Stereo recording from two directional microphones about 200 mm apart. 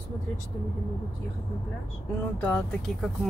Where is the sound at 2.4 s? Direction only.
5° left (ahead or behind).